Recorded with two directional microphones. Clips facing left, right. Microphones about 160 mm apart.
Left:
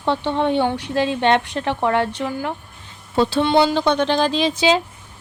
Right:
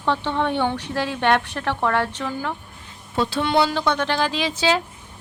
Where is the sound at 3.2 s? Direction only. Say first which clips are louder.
Left 4 dB; 30° left (ahead or behind).